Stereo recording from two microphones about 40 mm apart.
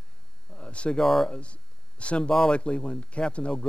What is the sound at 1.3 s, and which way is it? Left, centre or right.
Speech, left.